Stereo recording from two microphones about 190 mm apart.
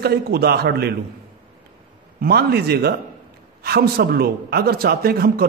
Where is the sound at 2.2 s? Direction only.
55° right (ahead or behind).